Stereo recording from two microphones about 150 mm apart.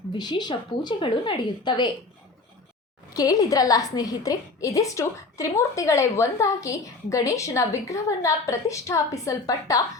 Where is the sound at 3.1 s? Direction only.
25° left (ahead or behind).